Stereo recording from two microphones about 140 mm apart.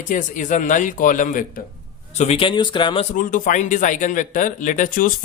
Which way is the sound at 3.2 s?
70° left (ahead or behind).